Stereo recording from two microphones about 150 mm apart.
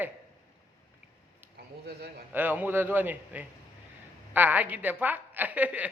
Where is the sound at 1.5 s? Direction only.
90° right.